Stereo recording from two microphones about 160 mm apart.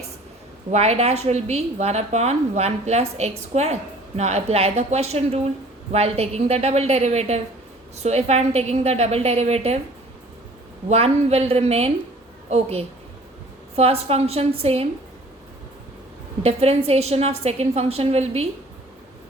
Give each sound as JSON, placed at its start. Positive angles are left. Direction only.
{"t": 0.7, "sound": "a woman's voice", "side_deg": -40}
{"t": 10.8, "sound": "a woman's voice", "side_deg": -40}
{"t": 16.4, "sound": "a woman's voice", "side_deg": -40}